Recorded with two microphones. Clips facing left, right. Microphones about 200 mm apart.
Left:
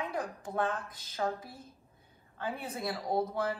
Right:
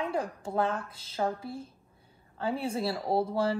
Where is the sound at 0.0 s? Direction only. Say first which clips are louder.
Right 4 dB; 30° right (ahead or behind).